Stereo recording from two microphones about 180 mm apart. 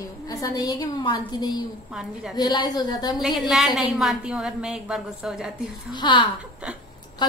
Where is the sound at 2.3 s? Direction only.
25° left (ahead or behind).